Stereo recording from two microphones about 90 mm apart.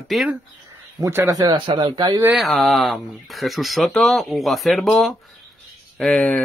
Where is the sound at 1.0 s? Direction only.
30° right (ahead or behind).